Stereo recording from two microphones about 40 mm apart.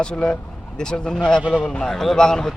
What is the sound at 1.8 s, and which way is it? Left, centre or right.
Speech, centre.